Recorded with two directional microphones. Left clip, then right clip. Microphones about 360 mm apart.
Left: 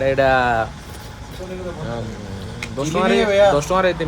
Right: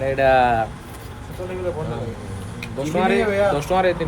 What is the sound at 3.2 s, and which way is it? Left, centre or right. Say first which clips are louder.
Speech: left 5 dB; left.